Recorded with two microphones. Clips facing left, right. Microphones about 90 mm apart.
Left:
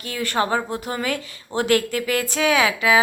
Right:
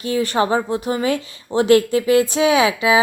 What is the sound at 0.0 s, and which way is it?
A woman's voice, 20° right (ahead or behind).